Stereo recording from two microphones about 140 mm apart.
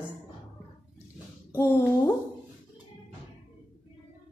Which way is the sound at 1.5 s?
20° left (ahead or behind).